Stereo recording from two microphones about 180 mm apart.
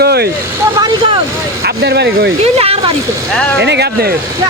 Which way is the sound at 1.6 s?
65° right (ahead or behind).